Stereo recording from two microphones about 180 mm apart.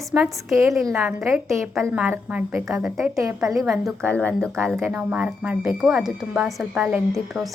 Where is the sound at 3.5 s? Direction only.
Centre (ahead or behind).